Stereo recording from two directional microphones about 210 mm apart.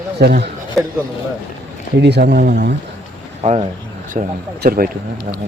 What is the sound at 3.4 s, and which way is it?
A man's voice, 30° right (ahead or behind).